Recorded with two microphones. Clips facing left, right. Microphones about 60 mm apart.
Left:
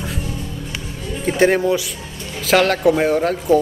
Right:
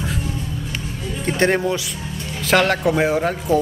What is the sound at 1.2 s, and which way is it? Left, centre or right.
Speech, centre.